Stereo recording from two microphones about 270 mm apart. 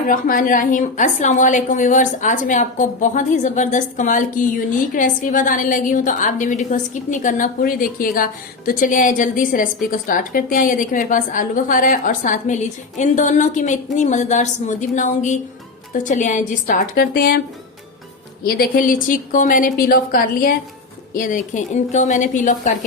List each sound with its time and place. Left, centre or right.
0.1 s a woman's voice: left
18.4 s a woman's voice: left